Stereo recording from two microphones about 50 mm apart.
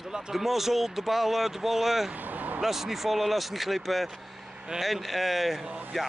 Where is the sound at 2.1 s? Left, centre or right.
Right.